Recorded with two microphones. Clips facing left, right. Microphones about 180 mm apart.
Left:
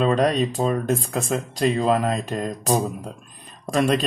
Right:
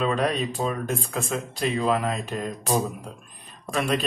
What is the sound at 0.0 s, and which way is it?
Speech, 40° left (ahead or behind).